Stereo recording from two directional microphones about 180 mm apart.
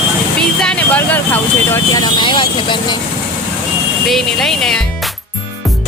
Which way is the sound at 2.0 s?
25° left (ahead or behind).